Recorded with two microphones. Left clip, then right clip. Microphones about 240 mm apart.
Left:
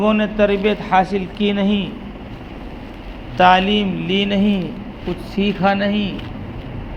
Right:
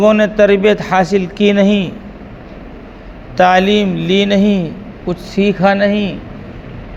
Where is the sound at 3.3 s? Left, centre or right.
Right.